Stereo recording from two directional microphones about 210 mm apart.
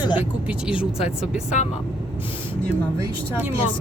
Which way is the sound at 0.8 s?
30° left (ahead or behind).